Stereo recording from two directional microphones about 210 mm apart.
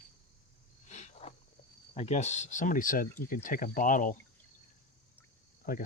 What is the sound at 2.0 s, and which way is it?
Speech, 35° left (ahead or behind).